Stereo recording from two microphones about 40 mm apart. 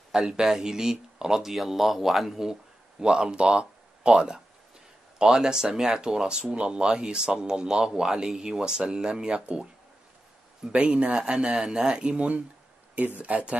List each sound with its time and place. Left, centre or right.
0.1 s speech: centre
1.5 s speech: centre
3.0 s speech: right
10.7 s speech: right
11.5 s speech: centre
12.0 s speech: right